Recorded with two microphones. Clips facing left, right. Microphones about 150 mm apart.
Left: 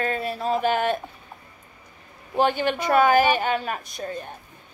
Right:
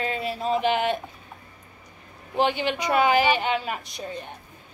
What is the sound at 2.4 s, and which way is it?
A woman's voice, 45° left (ahead or behind).